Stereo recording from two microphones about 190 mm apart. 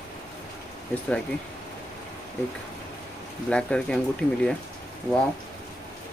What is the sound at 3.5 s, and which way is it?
Speech, 5° left (ahead or behind).